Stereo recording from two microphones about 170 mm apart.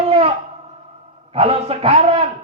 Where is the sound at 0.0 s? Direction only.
35° right (ahead or behind).